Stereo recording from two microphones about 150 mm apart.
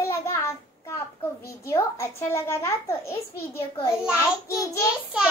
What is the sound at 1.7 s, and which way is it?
A child's voice, 15° left (ahead or behind).